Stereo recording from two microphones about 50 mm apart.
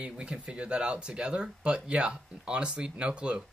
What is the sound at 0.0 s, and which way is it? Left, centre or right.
Speech, right.